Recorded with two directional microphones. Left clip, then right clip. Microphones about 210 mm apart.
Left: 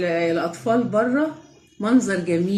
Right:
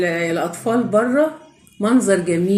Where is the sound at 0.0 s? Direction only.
20° right (ahead or behind).